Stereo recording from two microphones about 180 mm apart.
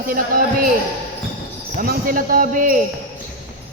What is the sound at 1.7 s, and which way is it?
Speech, 50° right (ahead or behind).